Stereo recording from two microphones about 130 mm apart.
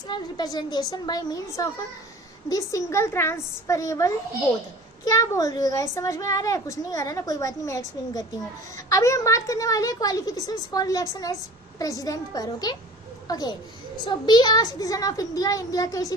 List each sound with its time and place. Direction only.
0.1 s a woman's voice: 30° left (ahead or behind)